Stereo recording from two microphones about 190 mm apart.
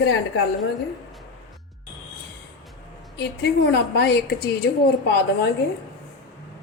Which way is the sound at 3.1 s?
60° left (ahead or behind).